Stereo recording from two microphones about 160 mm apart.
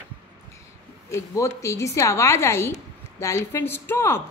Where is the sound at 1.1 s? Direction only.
15° left (ahead or behind).